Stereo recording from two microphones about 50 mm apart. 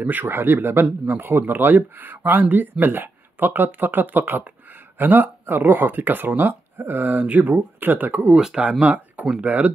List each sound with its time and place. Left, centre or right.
0.0 s speech: right